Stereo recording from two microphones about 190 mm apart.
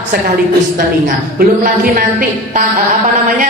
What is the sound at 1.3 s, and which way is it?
Speech, 50° right (ahead or behind).